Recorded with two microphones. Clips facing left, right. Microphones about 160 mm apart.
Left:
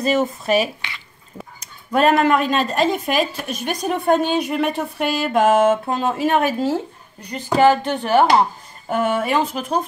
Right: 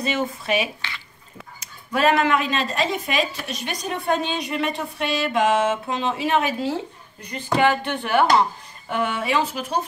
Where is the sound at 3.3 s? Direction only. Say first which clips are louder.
Left 5 dB; 50° left (ahead or behind).